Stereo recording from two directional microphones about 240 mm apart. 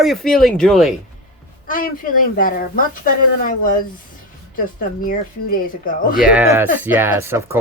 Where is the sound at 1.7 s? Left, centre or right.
Left.